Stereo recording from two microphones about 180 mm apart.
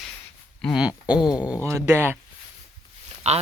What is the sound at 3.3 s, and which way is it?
Speech, 35° right (ahead or behind).